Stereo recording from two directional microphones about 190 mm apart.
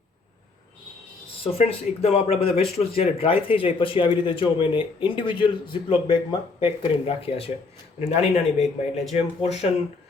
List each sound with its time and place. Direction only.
1.5 s speech: 35° left (ahead or behind)